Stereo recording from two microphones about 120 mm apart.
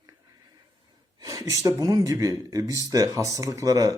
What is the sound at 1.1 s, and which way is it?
Speech, 30° right (ahead or behind).